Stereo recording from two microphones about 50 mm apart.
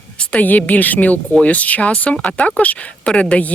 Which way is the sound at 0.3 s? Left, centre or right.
Left.